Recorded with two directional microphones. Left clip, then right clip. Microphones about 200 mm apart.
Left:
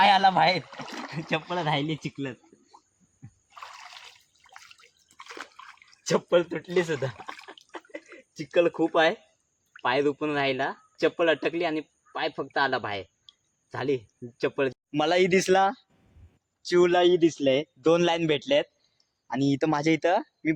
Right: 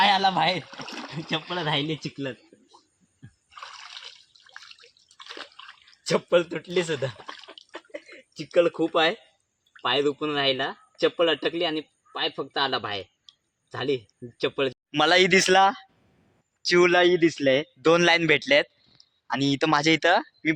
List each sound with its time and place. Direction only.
0.0 s speech: 5° left (ahead or behind)
5.3 s a sound: 5° left (ahead or behind)
10.2 s speech: 5° left (ahead or behind)
16.6 s a man's voice: 15° right (ahead or behind)
19.3 s speech: 10° left (ahead or behind)